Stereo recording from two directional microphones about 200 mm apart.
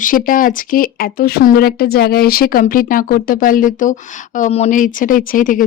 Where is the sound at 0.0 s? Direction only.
45° left (ahead or behind).